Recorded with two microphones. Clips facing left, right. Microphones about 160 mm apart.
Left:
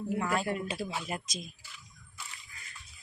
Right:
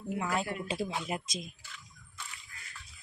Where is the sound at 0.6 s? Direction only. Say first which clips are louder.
Right 1 dB; 25° right (ahead or behind).